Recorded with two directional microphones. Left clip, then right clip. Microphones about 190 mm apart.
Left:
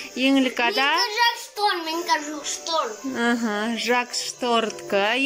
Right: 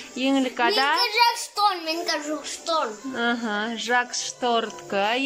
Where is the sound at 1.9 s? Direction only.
45° right (ahead or behind).